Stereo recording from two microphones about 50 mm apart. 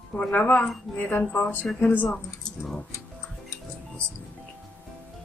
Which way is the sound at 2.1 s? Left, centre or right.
Centre.